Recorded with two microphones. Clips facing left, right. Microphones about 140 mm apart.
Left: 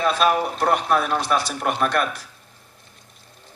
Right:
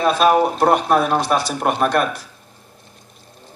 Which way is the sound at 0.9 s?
45° right (ahead or behind).